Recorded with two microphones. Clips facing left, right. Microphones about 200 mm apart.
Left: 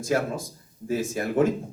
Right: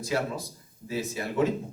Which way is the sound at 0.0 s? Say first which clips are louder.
Left 4 dB; 50° left (ahead or behind).